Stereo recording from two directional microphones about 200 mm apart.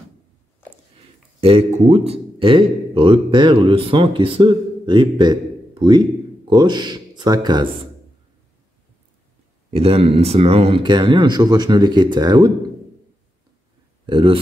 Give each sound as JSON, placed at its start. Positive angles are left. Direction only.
{"t": 1.4, "sound": "speech", "side_deg": -30}
{"t": 9.7, "sound": "speech", "side_deg": -30}
{"t": 14.0, "sound": "speech", "side_deg": -25}